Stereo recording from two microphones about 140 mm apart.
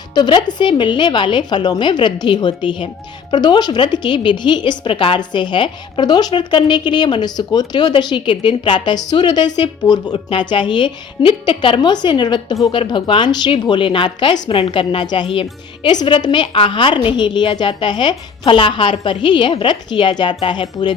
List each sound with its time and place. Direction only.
0.1 s a woman's voice: 30° left (ahead or behind)